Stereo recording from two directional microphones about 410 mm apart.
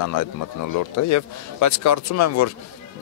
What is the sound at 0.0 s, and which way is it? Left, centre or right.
Speech, left.